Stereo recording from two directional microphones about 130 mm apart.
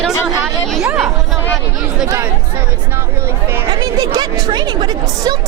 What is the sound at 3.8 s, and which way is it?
Speech, 30° right (ahead or behind).